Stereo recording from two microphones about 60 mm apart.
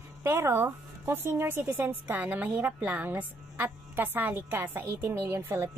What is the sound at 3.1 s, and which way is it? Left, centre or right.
A woman's voice, right.